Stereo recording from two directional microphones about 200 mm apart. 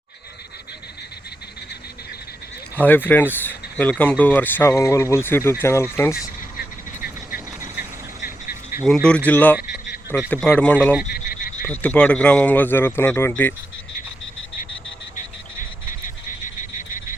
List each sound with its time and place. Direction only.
2.7 s speech: 10° left (ahead or behind)
7.3 s vehicle: 5° right (ahead or behind)
8.8 s speech: 5° left (ahead or behind)
11.1 s frog: 45° left (ahead or behind)
11.6 s speech: 10° left (ahead or behind)